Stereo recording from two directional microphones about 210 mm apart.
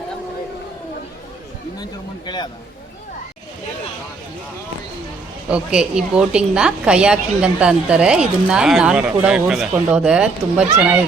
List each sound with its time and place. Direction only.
1.8 s a man's voice: 20° left (ahead or behind)
5.5 s a woman's voice: 5° right (ahead or behind)